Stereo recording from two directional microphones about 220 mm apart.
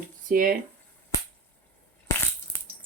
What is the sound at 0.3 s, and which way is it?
Speech, 40° right (ahead or behind).